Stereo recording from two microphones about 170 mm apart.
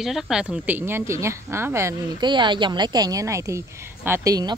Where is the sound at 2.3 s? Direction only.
30° right (ahead or behind).